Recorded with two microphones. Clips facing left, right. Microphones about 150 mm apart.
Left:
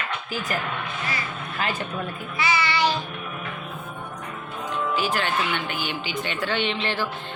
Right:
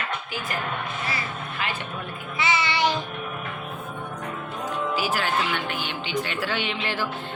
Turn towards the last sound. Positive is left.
turn(degrees=-10)  # may be behind; listen again after turning